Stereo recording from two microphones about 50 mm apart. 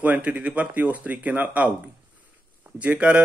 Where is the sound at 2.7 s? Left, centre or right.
Right.